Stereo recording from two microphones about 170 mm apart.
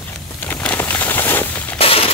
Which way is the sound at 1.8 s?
35° left (ahead or behind).